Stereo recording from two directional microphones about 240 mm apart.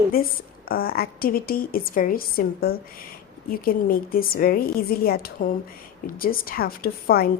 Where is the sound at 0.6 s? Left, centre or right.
Left.